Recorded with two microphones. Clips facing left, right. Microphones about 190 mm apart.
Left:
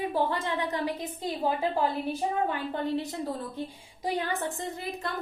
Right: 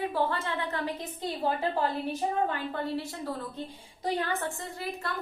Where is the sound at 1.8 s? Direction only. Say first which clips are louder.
Left 1 dB; 15° left (ahead or behind).